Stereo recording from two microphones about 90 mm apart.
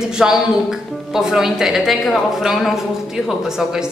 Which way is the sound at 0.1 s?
5° right (ahead or behind).